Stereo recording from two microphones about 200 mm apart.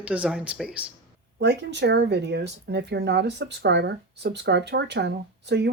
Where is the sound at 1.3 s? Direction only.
60° right (ahead or behind).